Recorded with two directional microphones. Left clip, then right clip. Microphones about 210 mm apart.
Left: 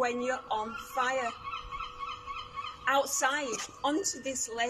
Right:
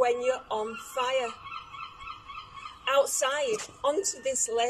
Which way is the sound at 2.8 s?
15° right (ahead or behind).